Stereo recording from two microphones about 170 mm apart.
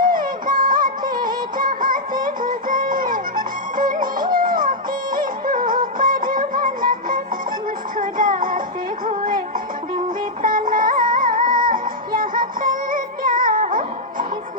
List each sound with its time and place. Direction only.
0.0 s music: 55° right (ahead or behind)
7.9 s music: 55° right (ahead or behind)
10.4 s music: 55° right (ahead or behind)